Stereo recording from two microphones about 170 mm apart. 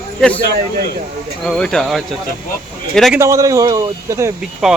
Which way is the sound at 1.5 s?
5° left (ahead or behind).